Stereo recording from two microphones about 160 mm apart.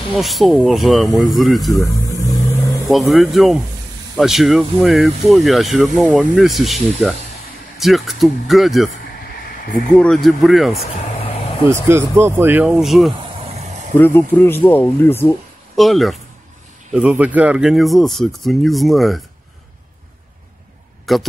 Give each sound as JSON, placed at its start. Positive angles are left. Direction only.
{"t": 0.1, "sound": "speech", "side_deg": 0}
{"t": 1.8, "sound": "vehicle", "side_deg": 20}
{"t": 2.9, "sound": "speech", "side_deg": 0}
{"t": 9.9, "sound": "speech", "side_deg": 5}
{"t": 11.7, "sound": "speech", "side_deg": -15}
{"t": 13.2, "sound": "a sound", "side_deg": -40}
{"t": 13.9, "sound": "speech", "side_deg": 15}
{"t": 15.7, "sound": "speech", "side_deg": 0}
{"t": 21.0, "sound": "a sound", "side_deg": 0}